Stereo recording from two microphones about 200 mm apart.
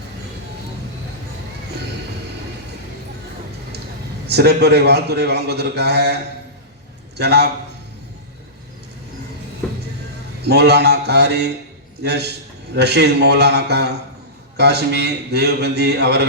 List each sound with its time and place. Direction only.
4.3 s a man's voice: 55° right (ahead or behind)
7.2 s a man's voice: 55° right (ahead or behind)
10.4 s a man's voice: 55° right (ahead or behind)